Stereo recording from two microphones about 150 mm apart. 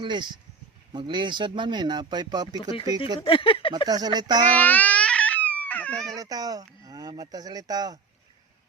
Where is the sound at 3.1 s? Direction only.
35° left (ahead or behind).